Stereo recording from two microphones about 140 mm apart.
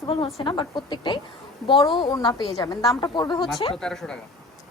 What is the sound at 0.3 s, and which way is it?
Speech, 35° left (ahead or behind).